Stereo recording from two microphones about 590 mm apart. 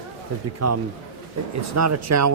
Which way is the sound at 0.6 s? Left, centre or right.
Right.